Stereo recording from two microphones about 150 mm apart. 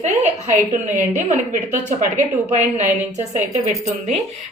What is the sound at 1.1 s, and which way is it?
Speech, 55° right (ahead or behind).